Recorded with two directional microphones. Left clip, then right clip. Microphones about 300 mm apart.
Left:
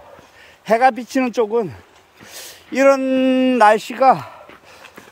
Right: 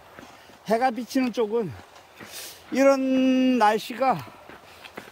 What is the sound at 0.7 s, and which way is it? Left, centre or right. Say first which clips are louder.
Speech: left 9 dB; centre.